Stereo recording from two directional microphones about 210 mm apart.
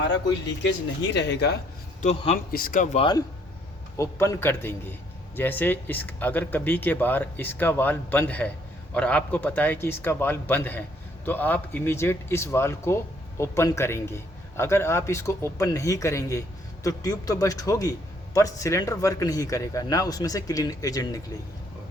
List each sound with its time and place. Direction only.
0.1 s speech: 55° left (ahead or behind)
2.0 s speech: 30° left (ahead or behind)
2.5 s speech: 45° left (ahead or behind); by 21.2 s 15° left (ahead or behind)